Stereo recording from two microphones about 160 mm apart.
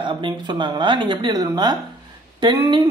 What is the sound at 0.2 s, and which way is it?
A woman's voice, 30° right (ahead or behind).